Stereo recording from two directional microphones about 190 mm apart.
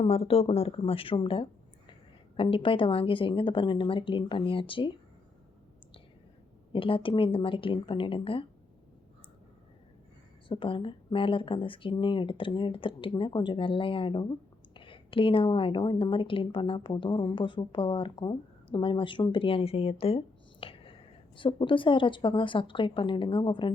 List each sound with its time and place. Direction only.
0.0 s speech: 30° left (ahead or behind)
6.7 s speech: 30° left (ahead or behind)
10.5 s speech: 25° left (ahead or behind)